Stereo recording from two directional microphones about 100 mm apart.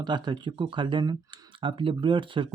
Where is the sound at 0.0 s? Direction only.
45° right (ahead or behind).